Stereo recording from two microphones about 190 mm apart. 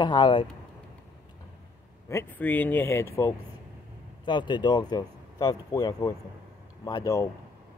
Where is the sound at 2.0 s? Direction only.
10° left (ahead or behind).